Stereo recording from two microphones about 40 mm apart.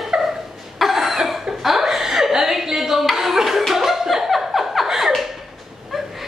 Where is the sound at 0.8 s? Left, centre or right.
Centre.